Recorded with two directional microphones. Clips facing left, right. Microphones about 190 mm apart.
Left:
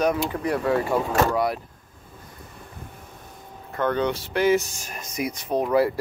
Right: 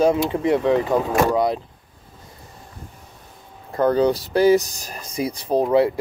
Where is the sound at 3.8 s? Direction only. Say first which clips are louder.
Right 6 dB; 35° right (ahead or behind).